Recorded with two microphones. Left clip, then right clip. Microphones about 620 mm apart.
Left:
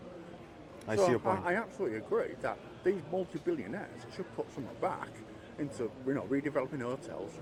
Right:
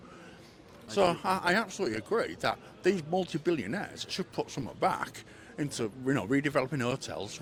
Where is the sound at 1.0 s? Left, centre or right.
Right.